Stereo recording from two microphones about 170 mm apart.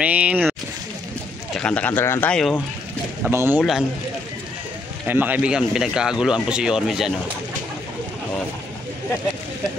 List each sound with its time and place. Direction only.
0.0 s speech: 10° right (ahead or behind)
1.5 s speech: 5° left (ahead or behind)
3.3 s speech: 10° right (ahead or behind)
5.0 s speech: 10° right (ahead or behind)